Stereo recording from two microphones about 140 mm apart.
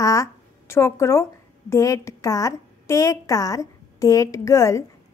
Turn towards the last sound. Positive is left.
turn(degrees=20)  # may be behind; listen again after turning